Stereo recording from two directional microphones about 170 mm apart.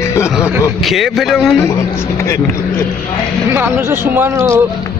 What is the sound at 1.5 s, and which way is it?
Speech, 15° left (ahead or behind).